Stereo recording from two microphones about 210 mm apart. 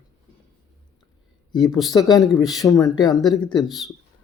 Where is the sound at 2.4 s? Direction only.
Centre (ahead or behind).